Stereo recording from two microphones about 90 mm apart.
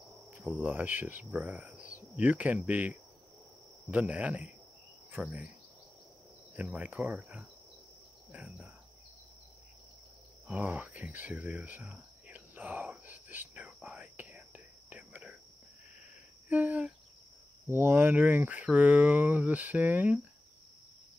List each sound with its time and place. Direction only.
0.6 s speech: 20° right (ahead or behind)
6.5 s speech: 15° right (ahead or behind)
10.4 s speech: 15° right (ahead or behind)
11.8 s whispering: 15° right (ahead or behind)
16.4 s cricket: 20° right (ahead or behind)
17.6 s speech: 25° right (ahead or behind)